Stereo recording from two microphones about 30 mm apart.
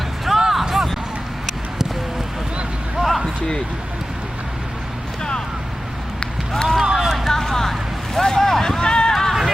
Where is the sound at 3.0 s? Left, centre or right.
Centre.